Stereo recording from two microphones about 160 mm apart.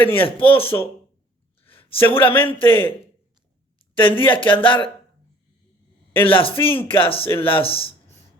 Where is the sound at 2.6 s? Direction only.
35° left (ahead or behind).